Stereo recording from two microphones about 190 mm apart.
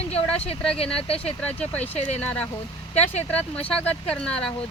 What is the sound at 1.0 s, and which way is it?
Speech, 30° left (ahead or behind).